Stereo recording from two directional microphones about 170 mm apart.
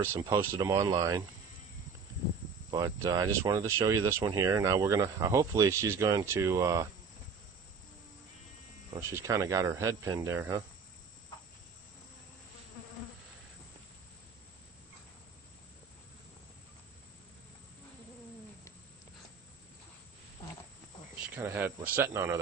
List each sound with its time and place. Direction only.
0.0 s speech: 15° right (ahead or behind)
2.6 s speech: 20° right (ahead or behind)
9.0 s speech: 15° right (ahead or behind)
21.3 s speech: 10° right (ahead or behind)